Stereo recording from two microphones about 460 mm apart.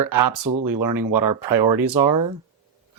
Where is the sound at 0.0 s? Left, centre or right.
Right.